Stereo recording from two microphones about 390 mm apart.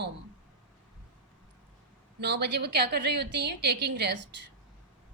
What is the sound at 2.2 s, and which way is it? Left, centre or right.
A woman's voice, right.